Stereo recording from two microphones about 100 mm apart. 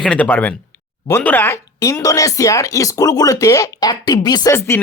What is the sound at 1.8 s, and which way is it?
Speech, 35° left (ahead or behind).